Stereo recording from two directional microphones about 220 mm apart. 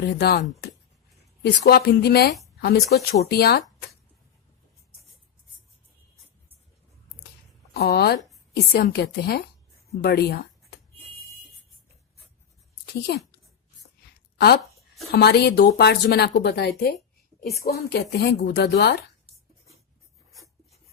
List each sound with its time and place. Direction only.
0.0 s speech: 45° left (ahead or behind)
1.5 s speech: 45° left (ahead or behind)
7.7 s speech: 45° left (ahead or behind)
12.8 s a sound: 45° left (ahead or behind)
14.3 s speech: 45° left (ahead or behind)